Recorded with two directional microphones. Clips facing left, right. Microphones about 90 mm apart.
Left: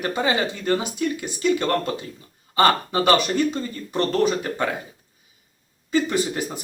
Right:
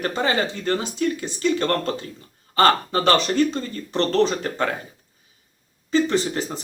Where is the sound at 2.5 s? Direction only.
15° left (ahead or behind).